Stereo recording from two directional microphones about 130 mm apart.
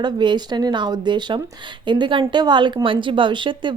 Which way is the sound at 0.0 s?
35° right (ahead or behind).